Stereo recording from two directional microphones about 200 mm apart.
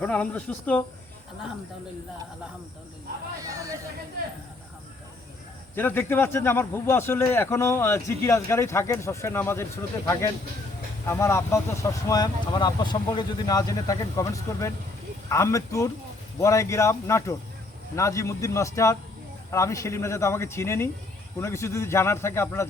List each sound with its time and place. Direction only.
0.0 s speech: 5° left (ahead or behind)
3.4 s speech: 15° right (ahead or behind)
5.7 s speech: 10° left (ahead or behind)
11.0 s speech: 15° left (ahead or behind)